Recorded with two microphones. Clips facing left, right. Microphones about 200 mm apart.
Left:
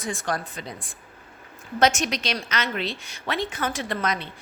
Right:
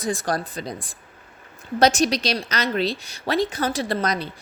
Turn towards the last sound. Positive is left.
turn(degrees=-35)  # may be behind; listen again after turning